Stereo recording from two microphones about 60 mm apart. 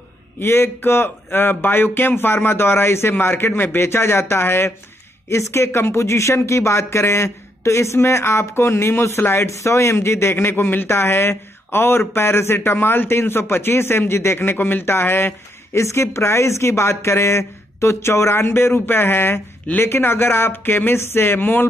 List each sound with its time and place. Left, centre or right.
0.4 s speech: left
15.8 s speech: left